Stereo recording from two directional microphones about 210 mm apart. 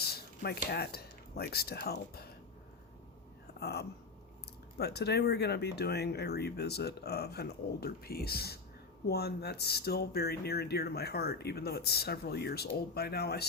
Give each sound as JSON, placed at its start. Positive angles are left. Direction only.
{"t": 0.0, "sound": "speech", "side_deg": 50}
{"t": 3.6, "sound": "speech", "side_deg": 50}